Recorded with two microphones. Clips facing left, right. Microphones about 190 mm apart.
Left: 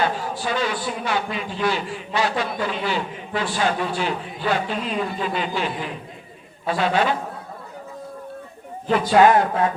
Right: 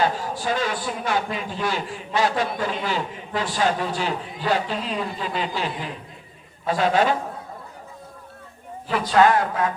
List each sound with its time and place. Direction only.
0.0 s a man's voice: 45° right (ahead or behind)
9.2 s speech: 15° left (ahead or behind)